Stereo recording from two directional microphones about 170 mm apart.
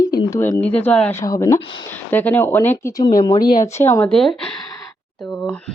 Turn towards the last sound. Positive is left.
turn(degrees=5)  # may be behind; listen again after turning